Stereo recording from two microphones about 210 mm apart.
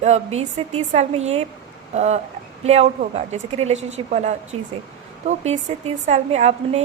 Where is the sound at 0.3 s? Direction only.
30° right (ahead or behind).